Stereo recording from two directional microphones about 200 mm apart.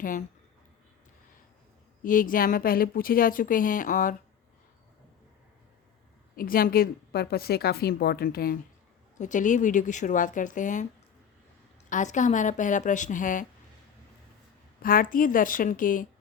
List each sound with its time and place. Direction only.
0.0 s speech: 40° left (ahead or behind)
2.0 s a woman's voice: 45° left (ahead or behind)
6.3 s a woman's voice: 45° left (ahead or behind)
9.1 s speech: 40° left (ahead or behind)
11.9 s speech: 40° left (ahead or behind)
14.8 s a woman's voice: 45° left (ahead or behind)